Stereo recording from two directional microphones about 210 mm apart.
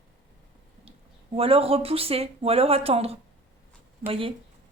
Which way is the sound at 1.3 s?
25° right (ahead or behind).